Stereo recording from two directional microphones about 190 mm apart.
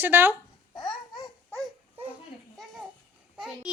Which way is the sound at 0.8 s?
20° left (ahead or behind).